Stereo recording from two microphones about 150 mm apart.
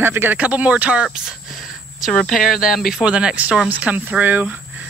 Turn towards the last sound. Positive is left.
turn(degrees=-10)  # may be behind; listen again after turning